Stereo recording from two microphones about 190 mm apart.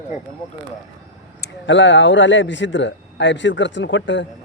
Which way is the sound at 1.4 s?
70° left (ahead or behind).